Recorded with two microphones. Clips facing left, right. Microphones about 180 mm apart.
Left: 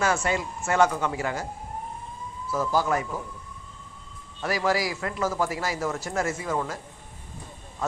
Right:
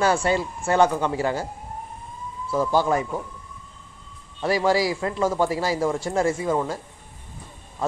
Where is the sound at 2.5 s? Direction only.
30° right (ahead or behind).